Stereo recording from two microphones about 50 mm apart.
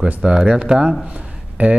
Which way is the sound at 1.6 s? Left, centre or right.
Right.